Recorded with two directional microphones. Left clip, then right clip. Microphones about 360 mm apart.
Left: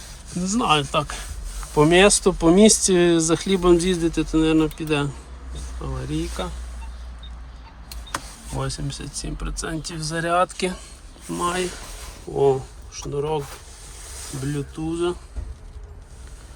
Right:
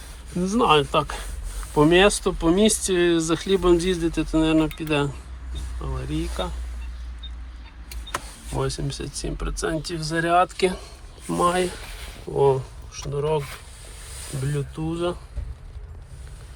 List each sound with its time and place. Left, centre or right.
0.4 s speech: centre
8.5 s speech: centre
14.4 s speech: centre